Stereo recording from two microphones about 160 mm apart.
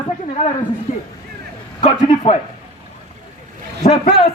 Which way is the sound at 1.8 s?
35° left (ahead or behind).